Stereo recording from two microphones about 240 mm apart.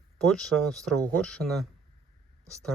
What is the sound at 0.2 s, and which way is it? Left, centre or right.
Speech, centre.